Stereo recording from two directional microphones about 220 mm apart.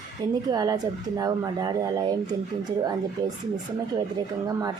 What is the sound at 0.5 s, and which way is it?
Speech, 15° right (ahead or behind).